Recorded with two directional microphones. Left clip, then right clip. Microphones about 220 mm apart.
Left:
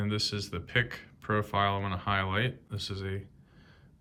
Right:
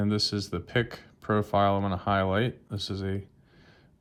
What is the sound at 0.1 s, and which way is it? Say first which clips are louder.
Speech: right 4 dB; 20° right (ahead or behind).